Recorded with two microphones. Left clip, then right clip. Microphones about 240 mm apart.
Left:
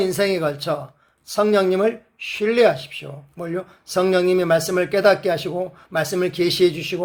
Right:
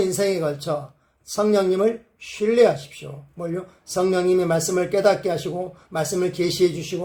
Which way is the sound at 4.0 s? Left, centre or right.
Left.